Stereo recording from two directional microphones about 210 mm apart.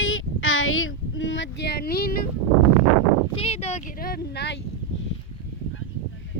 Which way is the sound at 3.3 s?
30° left (ahead or behind).